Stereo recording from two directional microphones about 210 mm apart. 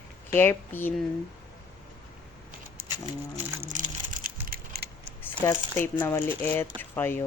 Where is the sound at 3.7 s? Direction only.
40° right (ahead or behind).